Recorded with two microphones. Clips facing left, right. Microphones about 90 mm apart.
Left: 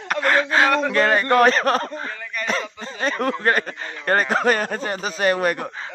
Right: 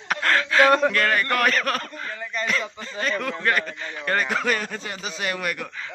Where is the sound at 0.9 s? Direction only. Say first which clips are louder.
Left 5 dB; 25° left (ahead or behind).